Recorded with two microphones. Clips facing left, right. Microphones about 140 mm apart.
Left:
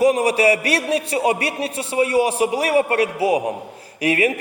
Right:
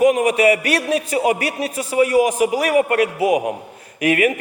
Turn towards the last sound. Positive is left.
turn(degrees=30)  # may be behind; listen again after turning